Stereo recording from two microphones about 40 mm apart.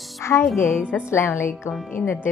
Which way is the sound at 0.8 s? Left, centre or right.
Centre.